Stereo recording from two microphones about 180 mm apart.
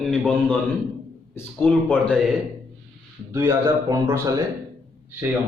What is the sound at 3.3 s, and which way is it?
Speech, 15° right (ahead or behind).